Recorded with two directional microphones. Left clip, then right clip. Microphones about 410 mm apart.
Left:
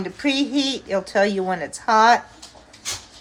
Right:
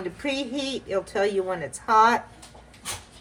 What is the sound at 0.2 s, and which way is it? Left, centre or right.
A woman's voice, left.